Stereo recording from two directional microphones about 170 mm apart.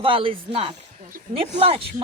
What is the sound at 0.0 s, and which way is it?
A woman's voice, 30° right (ahead or behind).